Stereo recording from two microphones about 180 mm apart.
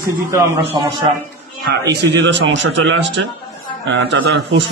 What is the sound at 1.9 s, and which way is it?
A man's voice, 70° right (ahead or behind).